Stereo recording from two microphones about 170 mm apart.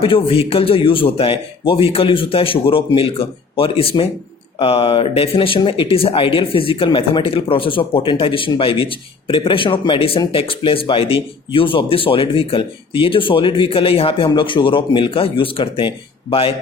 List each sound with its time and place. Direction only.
0.0 s speech: 30° left (ahead or behind)